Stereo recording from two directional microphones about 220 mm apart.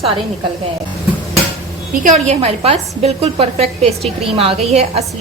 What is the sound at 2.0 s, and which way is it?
A woman's voice, 30° right (ahead or behind).